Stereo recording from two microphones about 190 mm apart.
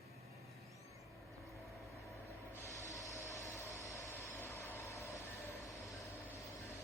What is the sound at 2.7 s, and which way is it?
Train, 15° left (ahead or behind).